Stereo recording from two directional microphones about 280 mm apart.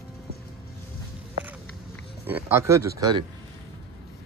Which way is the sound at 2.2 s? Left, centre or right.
Centre.